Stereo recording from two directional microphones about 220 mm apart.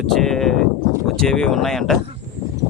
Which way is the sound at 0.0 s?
Centre (ahead or behind).